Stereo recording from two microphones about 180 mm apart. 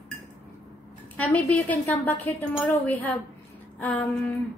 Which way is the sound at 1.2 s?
10° left (ahead or behind).